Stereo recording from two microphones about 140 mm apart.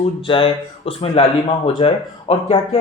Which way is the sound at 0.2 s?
40° left (ahead or behind).